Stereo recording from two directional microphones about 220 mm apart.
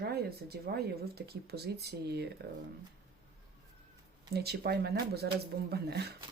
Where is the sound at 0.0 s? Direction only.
45° right (ahead or behind).